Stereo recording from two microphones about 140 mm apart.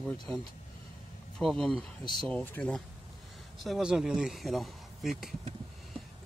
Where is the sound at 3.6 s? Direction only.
5° right (ahead or behind).